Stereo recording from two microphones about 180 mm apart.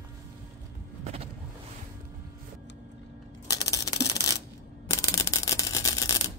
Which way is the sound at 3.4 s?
20° left (ahead or behind).